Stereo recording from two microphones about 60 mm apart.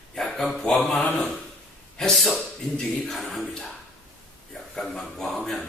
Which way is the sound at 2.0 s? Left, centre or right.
Centre.